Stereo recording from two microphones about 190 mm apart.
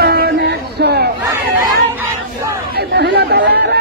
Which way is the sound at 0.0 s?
55° right (ahead or behind).